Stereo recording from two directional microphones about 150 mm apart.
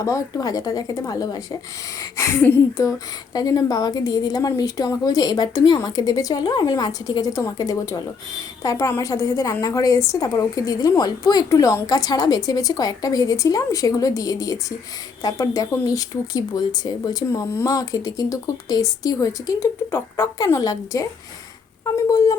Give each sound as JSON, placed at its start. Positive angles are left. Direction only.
{"t": 0.0, "sound": "a woman's voice", "side_deg": 20}